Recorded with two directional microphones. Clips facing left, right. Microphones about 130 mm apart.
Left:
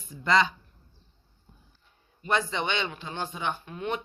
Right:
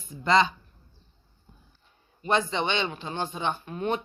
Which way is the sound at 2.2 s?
25° right (ahead or behind).